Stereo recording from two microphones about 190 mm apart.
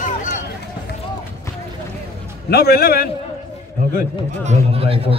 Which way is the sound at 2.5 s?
55° left (ahead or behind).